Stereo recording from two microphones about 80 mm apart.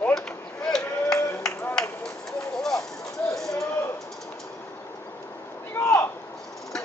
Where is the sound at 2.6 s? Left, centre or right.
Centre.